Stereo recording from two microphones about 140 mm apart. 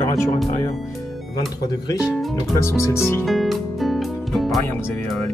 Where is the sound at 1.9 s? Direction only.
5° right (ahead or behind).